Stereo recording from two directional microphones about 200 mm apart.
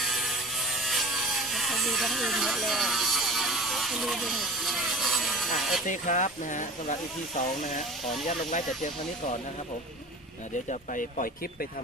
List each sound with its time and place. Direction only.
0.1 s a sound: centre (ahead or behind)
5.9 s speech: 40° left (ahead or behind)
10.7 s speech: 40° left (ahead or behind)